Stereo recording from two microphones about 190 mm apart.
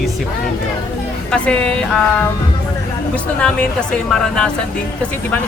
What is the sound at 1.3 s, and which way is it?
Speech, 5° left (ahead or behind).